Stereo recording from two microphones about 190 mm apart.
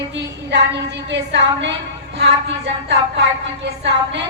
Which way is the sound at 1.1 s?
70° right (ahead or behind).